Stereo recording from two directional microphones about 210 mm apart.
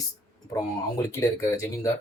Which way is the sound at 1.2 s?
15° left (ahead or behind).